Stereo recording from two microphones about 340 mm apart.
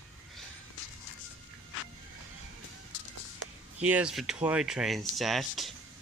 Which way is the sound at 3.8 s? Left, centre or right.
Centre.